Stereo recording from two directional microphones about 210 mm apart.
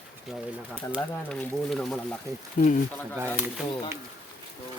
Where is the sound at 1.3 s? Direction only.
5° left (ahead or behind).